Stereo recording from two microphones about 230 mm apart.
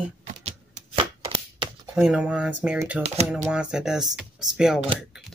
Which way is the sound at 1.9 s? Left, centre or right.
Centre.